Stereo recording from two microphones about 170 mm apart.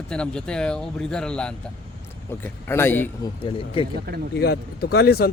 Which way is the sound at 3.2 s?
30° left (ahead or behind).